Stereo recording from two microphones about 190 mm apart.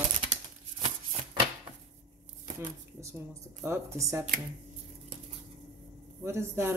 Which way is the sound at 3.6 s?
15° right (ahead or behind).